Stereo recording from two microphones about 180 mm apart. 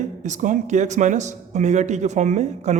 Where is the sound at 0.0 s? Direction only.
40° right (ahead or behind).